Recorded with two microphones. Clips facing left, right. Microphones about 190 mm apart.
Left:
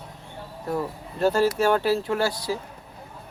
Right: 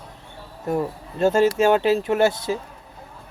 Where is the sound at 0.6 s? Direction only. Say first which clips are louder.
Right 4 dB; 20° right (ahead or behind).